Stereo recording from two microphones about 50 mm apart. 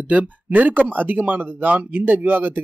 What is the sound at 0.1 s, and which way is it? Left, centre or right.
Speech, right.